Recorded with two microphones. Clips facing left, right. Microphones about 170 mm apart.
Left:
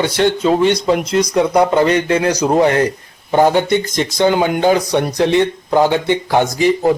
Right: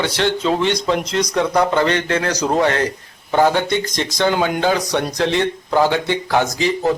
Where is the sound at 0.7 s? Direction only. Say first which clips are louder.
Left 4 dB; 10° left (ahead or behind).